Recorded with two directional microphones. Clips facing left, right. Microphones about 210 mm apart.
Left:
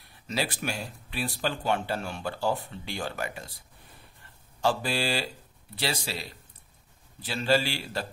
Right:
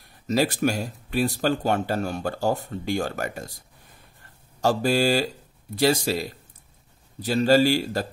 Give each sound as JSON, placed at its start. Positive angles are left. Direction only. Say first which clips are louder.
{"t": 0.0, "sound": "a man's voice", "louder": "right 9 dB", "side_deg": -45}